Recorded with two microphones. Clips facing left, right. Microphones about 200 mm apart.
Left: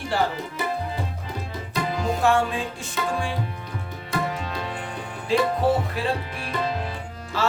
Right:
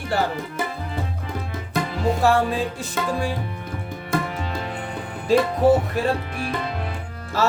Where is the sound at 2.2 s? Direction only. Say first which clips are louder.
Right 2 dB; 35° right (ahead or behind).